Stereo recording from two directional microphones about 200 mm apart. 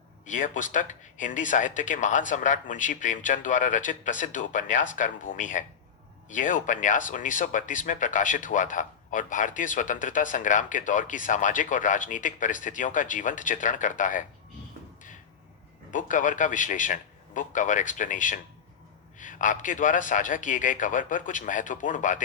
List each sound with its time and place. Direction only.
0.3 s speech: 40° left (ahead or behind)
15.9 s speech: 40° left (ahead or behind)